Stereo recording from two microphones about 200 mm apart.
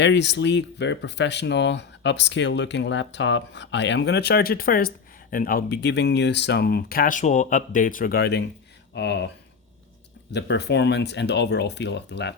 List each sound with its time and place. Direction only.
0.0 s speech: 60° left (ahead or behind)
10.3 s speech: 60° left (ahead or behind)